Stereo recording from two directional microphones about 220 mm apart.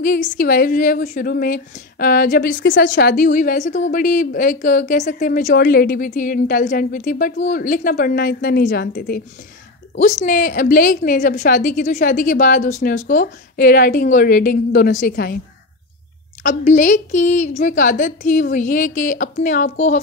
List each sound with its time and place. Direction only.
0.0 s a woman's voice: 40° left (ahead or behind)
16.4 s a woman's voice: 35° left (ahead or behind)